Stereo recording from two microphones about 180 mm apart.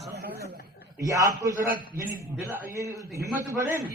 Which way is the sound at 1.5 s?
45° right (ahead or behind).